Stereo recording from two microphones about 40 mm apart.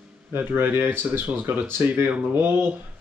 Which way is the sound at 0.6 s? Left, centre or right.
Right.